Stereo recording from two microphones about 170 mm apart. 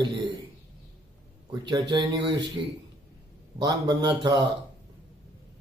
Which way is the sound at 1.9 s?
25° right (ahead or behind).